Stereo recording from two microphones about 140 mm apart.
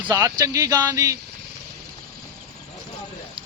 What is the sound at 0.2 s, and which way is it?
Speech, 20° right (ahead or behind).